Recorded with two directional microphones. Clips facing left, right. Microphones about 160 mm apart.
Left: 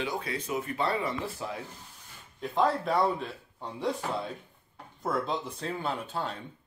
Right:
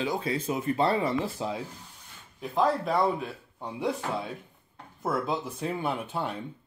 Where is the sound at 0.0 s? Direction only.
30° right (ahead or behind).